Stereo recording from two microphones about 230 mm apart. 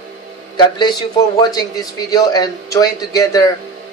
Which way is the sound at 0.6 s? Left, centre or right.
Centre.